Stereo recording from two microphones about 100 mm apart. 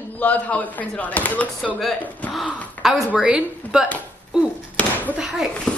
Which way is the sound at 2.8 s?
5° right (ahead or behind).